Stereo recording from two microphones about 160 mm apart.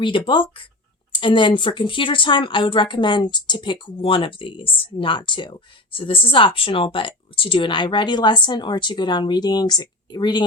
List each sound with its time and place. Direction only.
0.0 s a woman's voice: 30° left (ahead or behind)